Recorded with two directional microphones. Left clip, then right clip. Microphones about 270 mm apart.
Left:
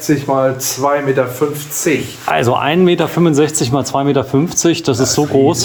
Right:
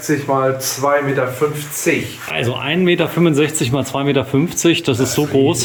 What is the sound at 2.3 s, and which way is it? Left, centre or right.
Speech, centre.